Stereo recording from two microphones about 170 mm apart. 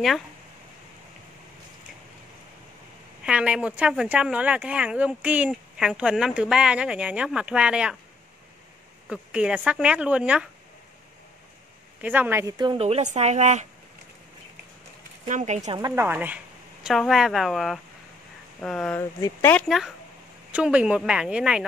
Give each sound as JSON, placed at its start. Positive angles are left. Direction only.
{"t": 3.3, "sound": "speech", "side_deg": -5}
{"t": 9.1, "sound": "speech", "side_deg": -5}
{"t": 12.0, "sound": "speech", "side_deg": -10}
{"t": 12.5, "sound": "speech", "side_deg": -30}
{"t": 15.2, "sound": "speech", "side_deg": -45}
{"t": 15.9, "sound": "speech", "side_deg": -10}
{"t": 18.9, "sound": "speech", "side_deg": 15}
{"t": 20.5, "sound": "speech", "side_deg": -5}